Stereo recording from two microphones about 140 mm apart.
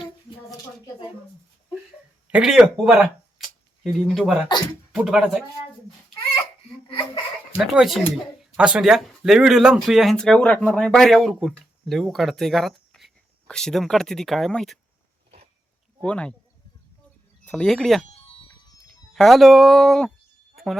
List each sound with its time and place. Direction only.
2.3 s speech: 5° right (ahead or behind)
6.8 s speech: 40° left (ahead or behind)
7.6 s speech: centre (ahead or behind)
16.0 s speech: 10° left (ahead or behind)
17.4 s speech: 10° left (ahead or behind)
19.1 s speech: centre (ahead or behind)